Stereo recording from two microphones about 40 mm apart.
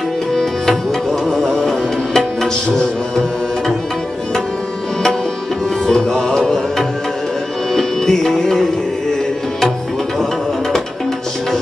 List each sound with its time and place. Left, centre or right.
0.3 s music: centre
5.9 s music: centre
7.7 s music: centre